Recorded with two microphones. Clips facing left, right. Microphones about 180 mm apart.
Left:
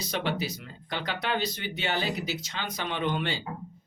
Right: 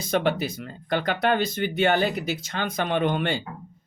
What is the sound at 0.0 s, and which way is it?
Speech, 50° right (ahead or behind).